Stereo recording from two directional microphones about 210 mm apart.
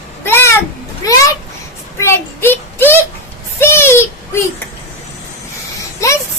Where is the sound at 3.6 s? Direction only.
10° left (ahead or behind).